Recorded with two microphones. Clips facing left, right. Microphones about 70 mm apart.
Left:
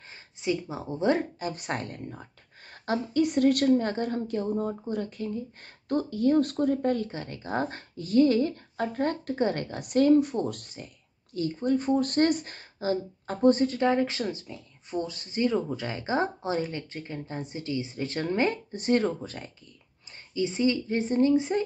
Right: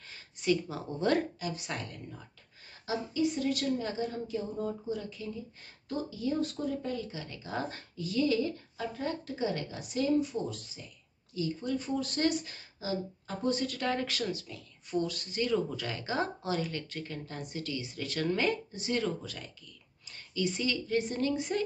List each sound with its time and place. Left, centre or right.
0.1 s speech: left
1.4 s speech: left
2.7 s speech: left
11.3 s speech: left